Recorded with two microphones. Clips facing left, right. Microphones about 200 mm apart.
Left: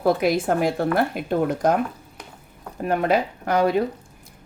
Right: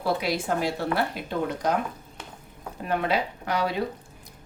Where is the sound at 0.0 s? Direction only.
50° left (ahead or behind).